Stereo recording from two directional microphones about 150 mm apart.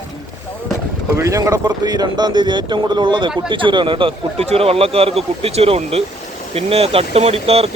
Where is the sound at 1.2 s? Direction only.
20° right (ahead or behind).